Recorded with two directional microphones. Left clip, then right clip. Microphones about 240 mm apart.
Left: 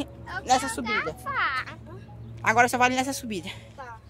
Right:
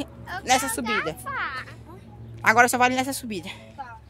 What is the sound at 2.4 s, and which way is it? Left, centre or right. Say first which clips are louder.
Speech: right 3 dB; centre.